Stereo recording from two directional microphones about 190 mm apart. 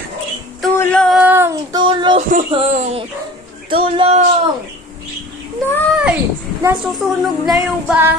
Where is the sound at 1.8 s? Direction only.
25° right (ahead or behind).